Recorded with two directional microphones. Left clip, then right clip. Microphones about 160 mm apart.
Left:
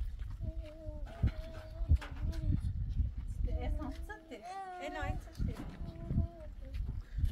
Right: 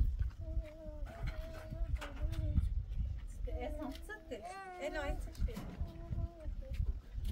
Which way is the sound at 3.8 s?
35° right (ahead or behind).